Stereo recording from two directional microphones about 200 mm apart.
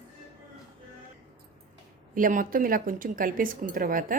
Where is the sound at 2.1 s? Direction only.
40° right (ahead or behind).